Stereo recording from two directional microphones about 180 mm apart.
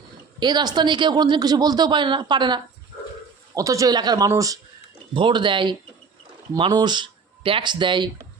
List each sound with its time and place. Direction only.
0.3 s speech: 25° right (ahead or behind)